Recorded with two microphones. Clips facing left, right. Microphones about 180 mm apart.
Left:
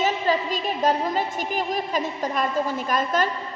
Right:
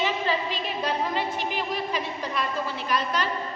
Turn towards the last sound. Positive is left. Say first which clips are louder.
# left 4 dB
turn(degrees=45)  # may be behind; listen again after turning